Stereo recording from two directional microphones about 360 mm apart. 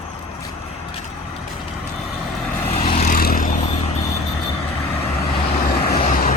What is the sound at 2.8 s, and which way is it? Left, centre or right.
Vehicle, centre.